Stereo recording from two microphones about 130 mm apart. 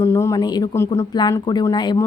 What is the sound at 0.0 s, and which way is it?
Speech, 25° left (ahead or behind).